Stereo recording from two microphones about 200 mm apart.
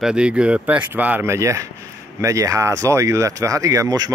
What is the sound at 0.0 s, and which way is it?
Speech, 5° right (ahead or behind).